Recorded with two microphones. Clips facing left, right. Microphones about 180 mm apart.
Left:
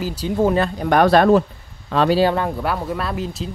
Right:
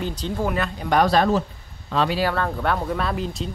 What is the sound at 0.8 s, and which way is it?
Speech, 55° left (ahead or behind).